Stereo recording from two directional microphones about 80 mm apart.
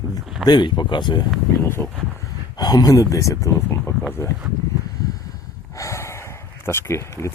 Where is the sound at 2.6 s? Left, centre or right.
Left.